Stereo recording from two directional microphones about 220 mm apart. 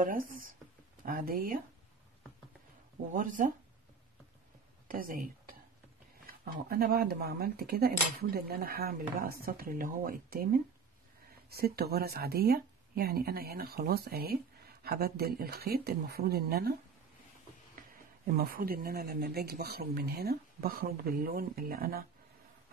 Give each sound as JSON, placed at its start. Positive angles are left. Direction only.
{"t": 0.0, "sound": "speech", "side_deg": -40}
{"t": 3.1, "sound": "speech", "side_deg": -35}
{"t": 4.8, "sound": "a sound", "side_deg": -40}
{"t": 6.2, "sound": "speech", "side_deg": -45}
{"t": 18.2, "sound": "speech", "side_deg": -40}